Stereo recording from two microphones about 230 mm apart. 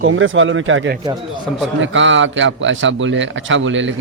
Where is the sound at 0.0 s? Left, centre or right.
Right.